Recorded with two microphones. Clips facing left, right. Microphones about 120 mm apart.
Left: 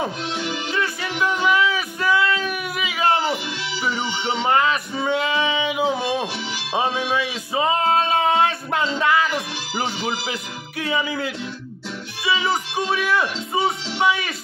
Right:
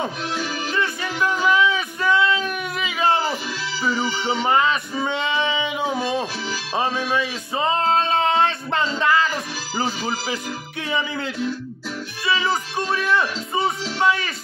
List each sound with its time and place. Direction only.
0.7 s a sound: 5° left (ahead or behind)
4.3 s male singing: centre (ahead or behind)
7.1 s music: 5° left (ahead or behind)
12.3 s music: 5° left (ahead or behind)
12.9 s speech: 10° left (ahead or behind)